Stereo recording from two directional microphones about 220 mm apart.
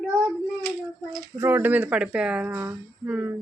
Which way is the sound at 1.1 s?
10° right (ahead or behind).